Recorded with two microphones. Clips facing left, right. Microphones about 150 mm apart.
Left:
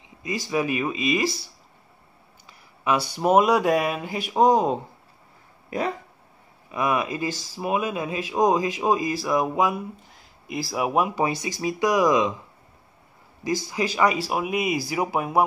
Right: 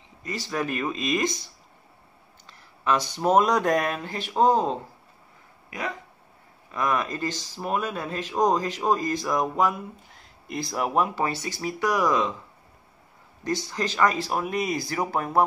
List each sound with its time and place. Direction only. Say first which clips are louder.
0.2 s speech: left 4 dB; 10° left (ahead or behind)
2.8 s speech: left 1 dB; 10° left (ahead or behind)
5.7 s speech: left 6 dB; 30° left (ahead or behind)
6.7 s speech: left 2 dB; 10° left (ahead or behind)
13.4 s speech: left 2 dB; 10° left (ahead or behind)